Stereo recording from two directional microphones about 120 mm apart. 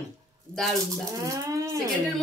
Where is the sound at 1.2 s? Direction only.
30° right (ahead or behind).